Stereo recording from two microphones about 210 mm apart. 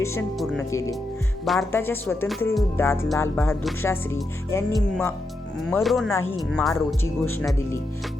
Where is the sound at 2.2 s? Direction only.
Centre (ahead or behind).